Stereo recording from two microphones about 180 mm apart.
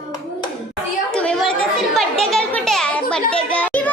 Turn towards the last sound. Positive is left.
turn(degrees=5)  # may be behind; listen again after turning